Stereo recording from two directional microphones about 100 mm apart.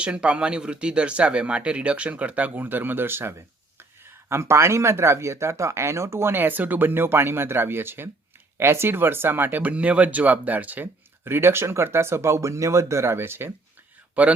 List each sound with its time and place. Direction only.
0.0 s speech: 10° right (ahead or behind)